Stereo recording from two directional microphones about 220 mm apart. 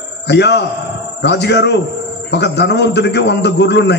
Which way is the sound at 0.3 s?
50° left (ahead or behind).